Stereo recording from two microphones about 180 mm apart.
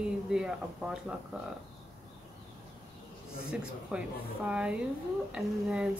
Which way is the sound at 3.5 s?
5° right (ahead or behind).